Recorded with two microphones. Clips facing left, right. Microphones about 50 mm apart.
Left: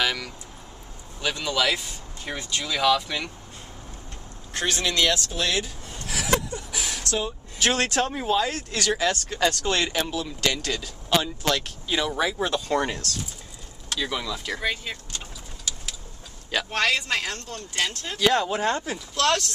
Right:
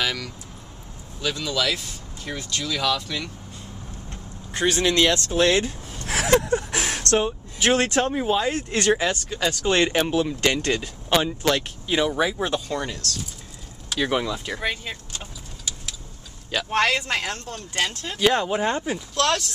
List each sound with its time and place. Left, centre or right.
0.0 s vehicle: centre
1.2 s speech: centre
4.6 s speech: right
6.0 s a sound: right
7.2 s speech: centre
9.0 s speech: centre
9.7 s speech: right
11.2 s speech: centre
12.1 s speech: centre
12.6 s speech: left
13.9 s speech: right
14.9 s vehicle: centre
16.7 s speech: centre
19.1 s speech: centre